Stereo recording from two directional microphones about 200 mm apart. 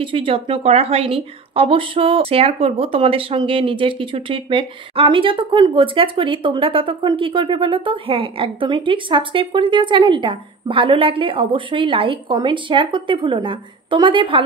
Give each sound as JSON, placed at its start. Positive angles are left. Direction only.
{"t": 0.0, "sound": "a woman's voice", "side_deg": -25}